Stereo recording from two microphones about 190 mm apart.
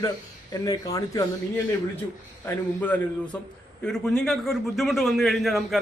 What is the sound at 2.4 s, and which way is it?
A man's voice, 10° left (ahead or behind).